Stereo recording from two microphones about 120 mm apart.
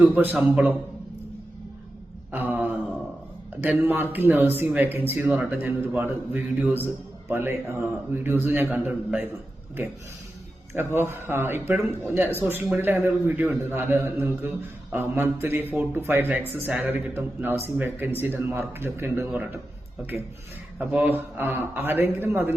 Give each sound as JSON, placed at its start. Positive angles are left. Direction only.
{"t": 0.0, "sound": "speech", "side_deg": -10}
{"t": 2.3, "sound": "mantra", "side_deg": -15}
{"t": 3.6, "sound": "speech", "side_deg": -15}
{"t": 10.8, "sound": "speech", "side_deg": -20}
{"t": 20.7, "sound": "speech", "side_deg": -10}